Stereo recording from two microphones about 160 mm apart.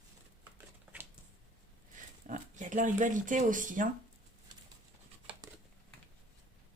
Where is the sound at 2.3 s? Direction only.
50° right (ahead or behind).